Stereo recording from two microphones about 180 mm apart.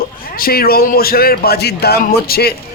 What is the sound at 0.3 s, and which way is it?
Speech, 55° left (ahead or behind).